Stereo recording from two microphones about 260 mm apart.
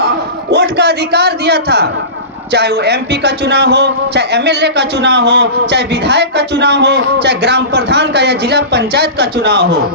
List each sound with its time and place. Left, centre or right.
0.5 s a man's voice: right